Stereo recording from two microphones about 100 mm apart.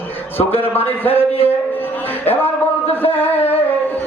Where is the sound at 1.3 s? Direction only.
75° left (ahead or behind).